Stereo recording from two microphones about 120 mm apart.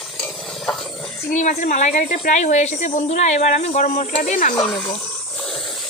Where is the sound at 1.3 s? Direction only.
90° left.